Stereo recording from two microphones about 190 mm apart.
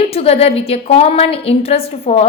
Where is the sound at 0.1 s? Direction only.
30° left (ahead or behind).